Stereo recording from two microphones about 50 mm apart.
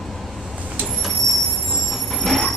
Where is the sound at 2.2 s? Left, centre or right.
Centre.